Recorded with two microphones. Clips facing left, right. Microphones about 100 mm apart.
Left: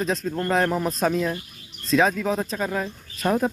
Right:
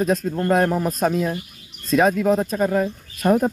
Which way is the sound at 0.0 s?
5° right (ahead or behind).